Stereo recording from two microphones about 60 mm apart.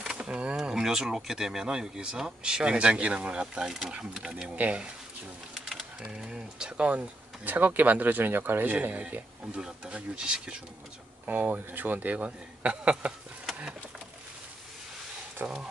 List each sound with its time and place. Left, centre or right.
0.0 s a sound: centre
0.6 s speech: centre
5.5 s a sound: centre
6.0 s speech: centre
6.9 s speech: right
8.7 s speech: right
9.6 s speech: centre
11.2 s speech: right
15.4 s speech: right